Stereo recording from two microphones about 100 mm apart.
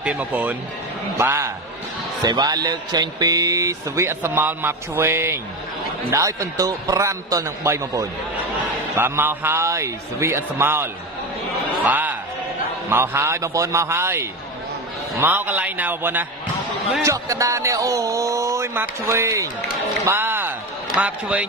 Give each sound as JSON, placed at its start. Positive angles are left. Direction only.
{"t": 0.0, "sound": "a man's voice", "side_deg": -15}
{"t": 2.2, "sound": "a man's voice", "side_deg": -40}
{"t": 8.9, "sound": "a man's voice", "side_deg": -20}
{"t": 17.0, "sound": "a man's voice", "side_deg": -30}
{"t": 20.1, "sound": "music", "side_deg": -25}
{"t": 20.9, "sound": "speech", "side_deg": -10}